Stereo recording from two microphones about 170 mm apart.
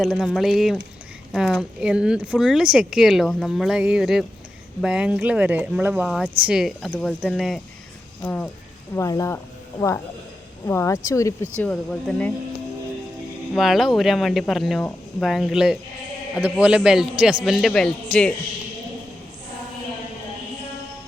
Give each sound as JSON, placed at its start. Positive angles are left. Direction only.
{"t": 0.0, "sound": "speech", "side_deg": -5}
{"t": 10.7, "sound": "speech", "side_deg": 15}
{"t": 11.6, "sound": "speech", "side_deg": 5}
{"t": 13.5, "sound": "speech", "side_deg": 0}